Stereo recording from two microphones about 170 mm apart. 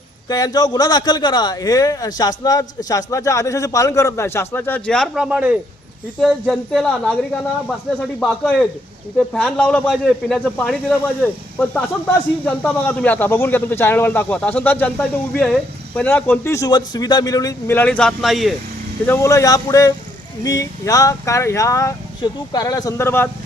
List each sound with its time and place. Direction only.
0.3 s a man's voice: 20° left (ahead or behind); by 18.5 s centre (ahead or behind)
19.0 s a man's voice: 15° left (ahead or behind)